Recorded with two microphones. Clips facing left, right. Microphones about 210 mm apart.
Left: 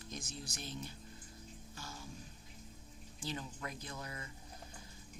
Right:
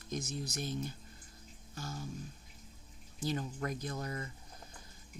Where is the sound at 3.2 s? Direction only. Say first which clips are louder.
Right 7 dB; 45° right (ahead or behind).